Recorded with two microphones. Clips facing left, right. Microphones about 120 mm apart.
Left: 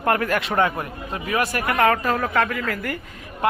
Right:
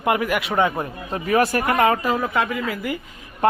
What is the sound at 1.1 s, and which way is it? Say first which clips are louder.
Speech: right 5 dB; 35° right (ahead or behind).